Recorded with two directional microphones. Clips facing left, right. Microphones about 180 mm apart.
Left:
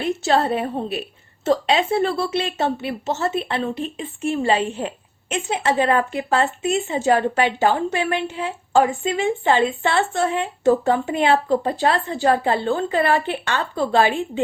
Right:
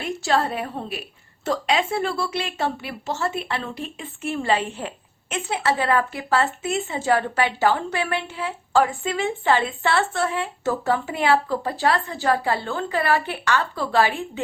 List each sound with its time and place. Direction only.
0.0 s speech: 25° left (ahead or behind)